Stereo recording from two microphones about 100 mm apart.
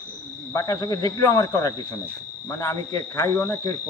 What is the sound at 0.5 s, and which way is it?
Speech, 35° left (ahead or behind).